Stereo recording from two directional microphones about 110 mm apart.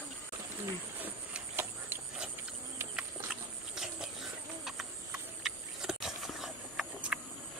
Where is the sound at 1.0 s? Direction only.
20° right (ahead or behind).